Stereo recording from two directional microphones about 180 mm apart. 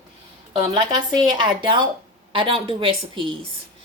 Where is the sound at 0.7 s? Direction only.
25° right (ahead or behind).